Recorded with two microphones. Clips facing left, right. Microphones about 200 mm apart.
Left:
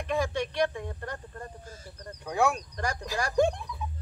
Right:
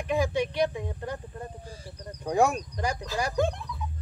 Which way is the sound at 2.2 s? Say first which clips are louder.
Right 3 dB; 40° right (ahead or behind).